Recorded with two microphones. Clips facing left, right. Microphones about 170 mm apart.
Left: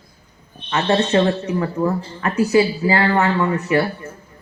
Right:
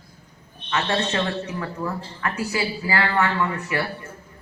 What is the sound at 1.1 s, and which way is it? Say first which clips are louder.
A woman's voice: left 8 dB; 20° left (ahead or behind).